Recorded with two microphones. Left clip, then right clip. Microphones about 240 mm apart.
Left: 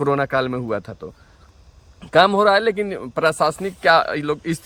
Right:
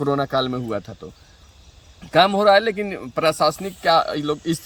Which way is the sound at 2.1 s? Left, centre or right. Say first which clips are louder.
Even; left.